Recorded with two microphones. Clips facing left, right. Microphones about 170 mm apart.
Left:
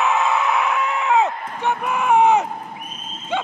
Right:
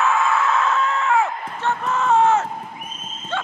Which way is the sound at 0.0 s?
20° left (ahead or behind).